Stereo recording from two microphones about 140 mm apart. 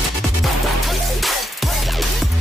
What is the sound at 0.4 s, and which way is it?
Music, centre (ahead or behind).